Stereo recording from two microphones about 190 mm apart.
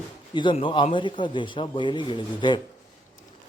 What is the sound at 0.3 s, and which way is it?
Speech, 25° left (ahead or behind).